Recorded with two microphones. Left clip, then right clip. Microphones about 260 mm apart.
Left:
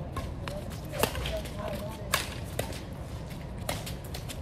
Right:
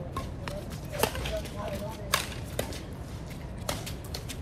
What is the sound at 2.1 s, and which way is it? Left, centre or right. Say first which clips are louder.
Horse: right 1 dB; centre.